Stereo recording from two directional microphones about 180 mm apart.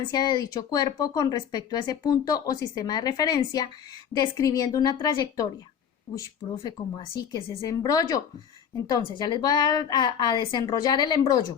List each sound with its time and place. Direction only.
0.1 s speech: 25° left (ahead or behind)
6.6 s speech: 20° left (ahead or behind)